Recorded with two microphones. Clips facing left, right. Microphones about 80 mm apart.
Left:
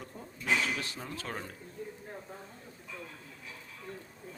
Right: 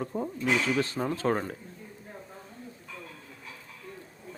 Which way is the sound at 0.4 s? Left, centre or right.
Right.